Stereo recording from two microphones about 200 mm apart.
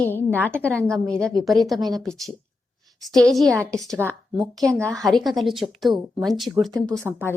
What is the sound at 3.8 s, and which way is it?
Speech, 15° right (ahead or behind).